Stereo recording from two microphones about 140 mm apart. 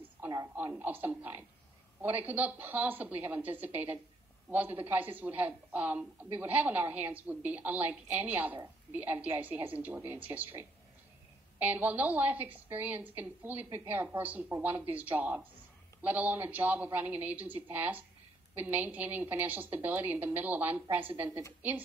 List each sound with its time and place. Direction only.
0.7 s a woman's voice: 15° right (ahead or behind)